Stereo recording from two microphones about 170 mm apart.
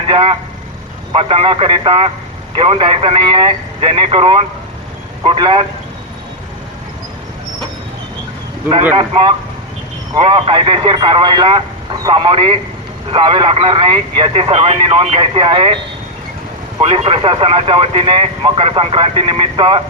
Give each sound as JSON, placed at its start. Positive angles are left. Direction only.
{"t": 0.1, "sound": "speech", "side_deg": -30}
{"t": 9.0, "sound": "speech", "side_deg": -30}
{"t": 16.8, "sound": "speech", "side_deg": -30}